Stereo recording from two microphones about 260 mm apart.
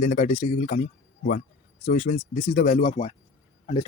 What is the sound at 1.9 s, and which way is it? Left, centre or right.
Speech, left.